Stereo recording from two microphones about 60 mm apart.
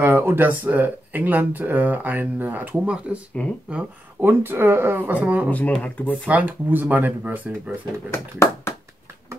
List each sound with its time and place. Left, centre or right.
0.0 s speech: right
2.8 s speech: centre
3.4 s speech: left
4.2 s speech: right
5.1 s speech: right
5.7 s speech: left
6.2 s speech: right
8.1 s a sound: left